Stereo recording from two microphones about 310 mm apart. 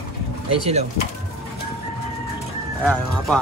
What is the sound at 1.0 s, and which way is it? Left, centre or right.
Speech, left.